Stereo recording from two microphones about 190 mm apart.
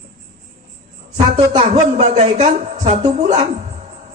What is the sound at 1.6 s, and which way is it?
A woman's voice, 35° right (ahead or behind).